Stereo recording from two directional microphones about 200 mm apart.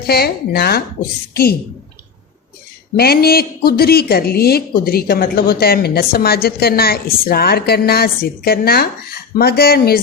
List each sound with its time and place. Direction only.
0.1 s speech: 50° left (ahead or behind)
2.9 s speech: 50° left (ahead or behind)